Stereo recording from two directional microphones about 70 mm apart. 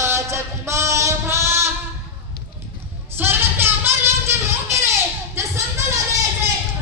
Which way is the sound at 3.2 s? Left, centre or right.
Right.